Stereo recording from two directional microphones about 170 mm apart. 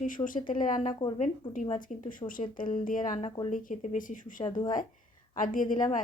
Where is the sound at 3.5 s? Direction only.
50° left (ahead or behind).